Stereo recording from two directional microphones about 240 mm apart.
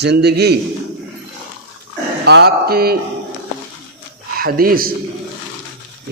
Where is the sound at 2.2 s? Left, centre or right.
Right.